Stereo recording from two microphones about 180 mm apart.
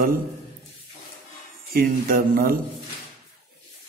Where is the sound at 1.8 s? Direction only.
55° right (ahead or behind).